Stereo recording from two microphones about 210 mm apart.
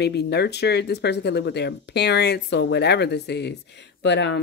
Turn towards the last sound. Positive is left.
turn(degrees=55)  # may be behind; listen again after turning